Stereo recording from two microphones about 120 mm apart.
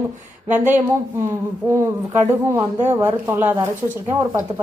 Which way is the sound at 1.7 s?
25° right (ahead or behind).